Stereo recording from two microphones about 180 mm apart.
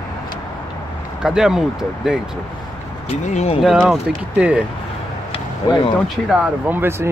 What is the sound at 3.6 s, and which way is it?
Speech, centre (ahead or behind).